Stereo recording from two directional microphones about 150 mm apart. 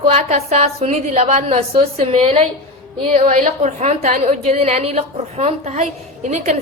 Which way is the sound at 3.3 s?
55° right (ahead or behind).